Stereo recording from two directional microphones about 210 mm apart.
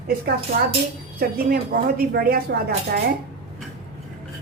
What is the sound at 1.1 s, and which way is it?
Speech, 45° right (ahead or behind).